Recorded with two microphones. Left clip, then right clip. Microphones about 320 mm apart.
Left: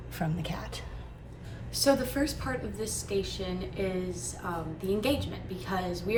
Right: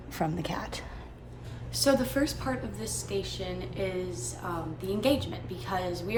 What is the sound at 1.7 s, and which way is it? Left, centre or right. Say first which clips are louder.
A woman's voice: even; centre.